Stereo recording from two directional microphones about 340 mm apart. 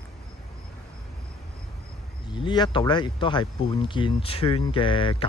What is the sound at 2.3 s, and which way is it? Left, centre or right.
Speech, centre.